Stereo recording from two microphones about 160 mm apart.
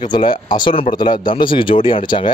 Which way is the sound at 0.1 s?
30° left (ahead or behind).